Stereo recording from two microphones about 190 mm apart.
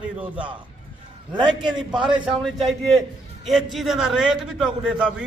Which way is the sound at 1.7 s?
5° right (ahead or behind).